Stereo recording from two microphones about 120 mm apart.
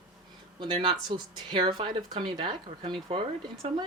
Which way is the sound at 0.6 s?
45° right (ahead or behind).